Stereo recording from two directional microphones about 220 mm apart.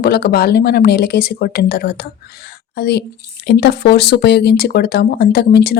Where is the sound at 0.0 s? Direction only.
45° left (ahead or behind).